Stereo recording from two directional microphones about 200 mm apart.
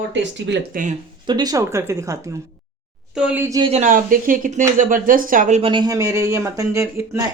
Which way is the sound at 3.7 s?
40° right (ahead or behind).